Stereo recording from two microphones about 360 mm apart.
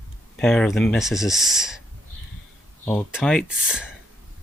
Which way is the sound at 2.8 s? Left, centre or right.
Centre.